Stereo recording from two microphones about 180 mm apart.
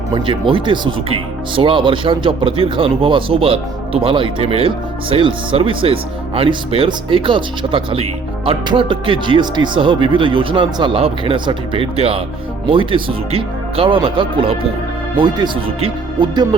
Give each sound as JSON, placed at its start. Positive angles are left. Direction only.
{"t": 0.1, "sound": "speech", "side_deg": -30}